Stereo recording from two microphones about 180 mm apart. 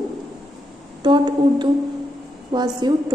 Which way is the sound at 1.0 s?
25° right (ahead or behind).